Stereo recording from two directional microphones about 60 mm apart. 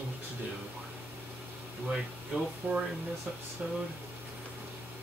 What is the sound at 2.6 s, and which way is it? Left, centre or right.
Speech, right.